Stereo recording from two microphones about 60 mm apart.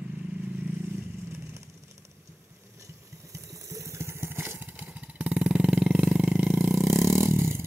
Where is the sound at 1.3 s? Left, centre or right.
Right.